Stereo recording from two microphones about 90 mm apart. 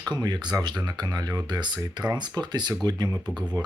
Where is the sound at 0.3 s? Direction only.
55° right (ahead or behind).